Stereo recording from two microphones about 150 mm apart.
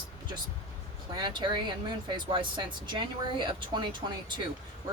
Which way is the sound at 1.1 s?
30° right (ahead or behind).